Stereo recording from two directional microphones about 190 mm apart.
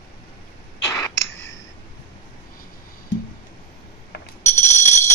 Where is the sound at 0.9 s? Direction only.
15° left (ahead or behind).